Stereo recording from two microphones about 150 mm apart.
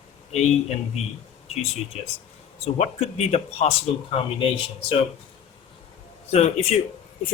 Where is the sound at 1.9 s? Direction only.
45° left (ahead or behind).